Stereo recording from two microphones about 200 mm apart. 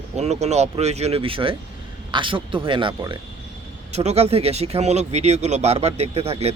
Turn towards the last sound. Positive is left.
turn(degrees=-30)  # may be behind; listen again after turning